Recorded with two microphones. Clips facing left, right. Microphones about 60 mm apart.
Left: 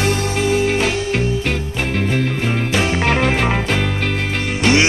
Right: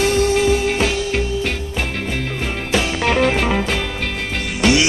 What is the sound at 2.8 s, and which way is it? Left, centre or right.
Music, left.